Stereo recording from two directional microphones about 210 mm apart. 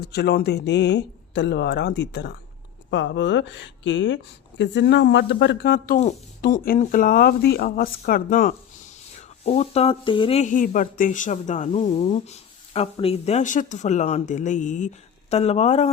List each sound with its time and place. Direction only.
0.0 s speech: 50° left (ahead or behind); by 15.9 s 30° left (ahead or behind)